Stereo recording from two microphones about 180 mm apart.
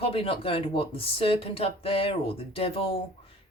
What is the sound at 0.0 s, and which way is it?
Speech, 30° left (ahead or behind).